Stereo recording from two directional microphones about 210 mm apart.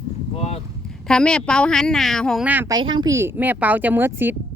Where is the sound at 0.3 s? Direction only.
30° left (ahead or behind).